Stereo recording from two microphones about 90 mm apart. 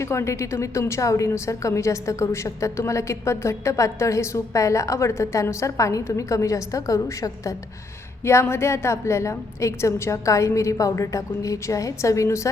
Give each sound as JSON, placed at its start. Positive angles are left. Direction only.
{"t": 0.0, "sound": "a woman's voice", "side_deg": 30}